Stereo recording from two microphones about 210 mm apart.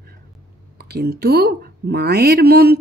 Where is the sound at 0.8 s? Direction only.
50° right (ahead or behind).